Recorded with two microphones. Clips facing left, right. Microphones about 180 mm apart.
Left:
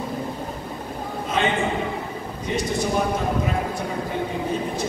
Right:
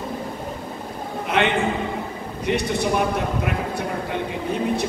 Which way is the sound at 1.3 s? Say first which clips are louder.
Right 2 dB; 65° right (ahead or behind).